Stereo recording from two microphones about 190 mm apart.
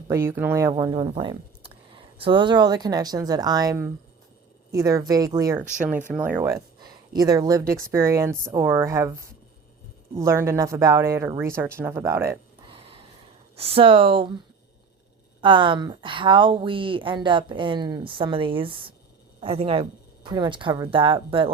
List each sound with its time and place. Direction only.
0.1 s speech: 10° right (ahead or behind)
0.8 s speech: 25° right (ahead or behind)
10.2 s speech: 15° right (ahead or behind)
12.6 s a sound: 30° right (ahead or behind)
13.6 s a woman's voice: 30° right (ahead or behind)
15.4 s a woman's voice: 25° right (ahead or behind)